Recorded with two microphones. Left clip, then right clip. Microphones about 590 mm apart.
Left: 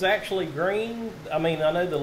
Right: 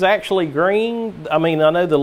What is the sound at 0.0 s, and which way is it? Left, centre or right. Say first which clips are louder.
Speech: right 8 dB; right.